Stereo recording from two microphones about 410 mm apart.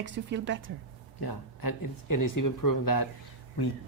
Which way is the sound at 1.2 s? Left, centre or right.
Left.